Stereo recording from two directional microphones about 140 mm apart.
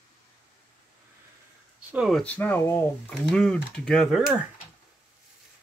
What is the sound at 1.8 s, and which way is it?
Speech, 10° right (ahead or behind).